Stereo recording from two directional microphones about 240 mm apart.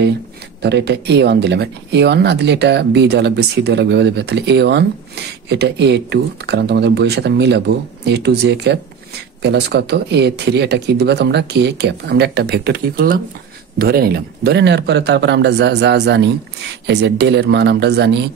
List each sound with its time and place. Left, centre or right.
0.6 s speech: right